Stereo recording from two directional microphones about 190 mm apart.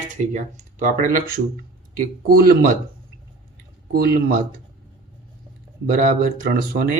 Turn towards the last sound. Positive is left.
turn(degrees=-50)  # may be behind; listen again after turning